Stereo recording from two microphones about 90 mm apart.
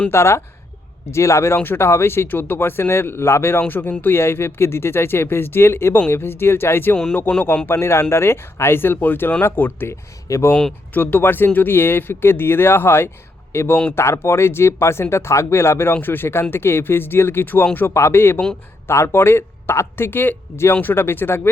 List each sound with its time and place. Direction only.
0.1 s speech: 30° left (ahead or behind)
6.9 s a man's voice: 10° left (ahead or behind)
7.7 s speech: 30° left (ahead or behind)
10.2 s speech: 35° left (ahead or behind)
10.5 s speech: 15° left (ahead or behind)